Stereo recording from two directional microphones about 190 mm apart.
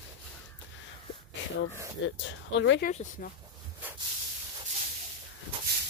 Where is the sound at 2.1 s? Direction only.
75° left (ahead or behind).